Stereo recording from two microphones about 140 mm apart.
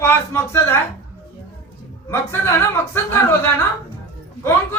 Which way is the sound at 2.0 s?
15° left (ahead or behind).